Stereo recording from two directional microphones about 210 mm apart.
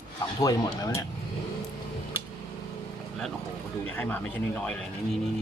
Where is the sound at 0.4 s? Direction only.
15° left (ahead or behind).